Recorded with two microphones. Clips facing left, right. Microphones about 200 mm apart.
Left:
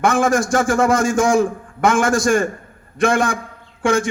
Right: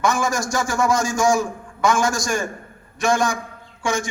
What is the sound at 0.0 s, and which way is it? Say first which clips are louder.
A man's voice: left 5 dB; 55° left (ahead or behind).